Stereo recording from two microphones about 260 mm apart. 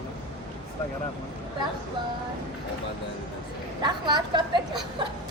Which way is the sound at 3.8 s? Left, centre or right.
Centre.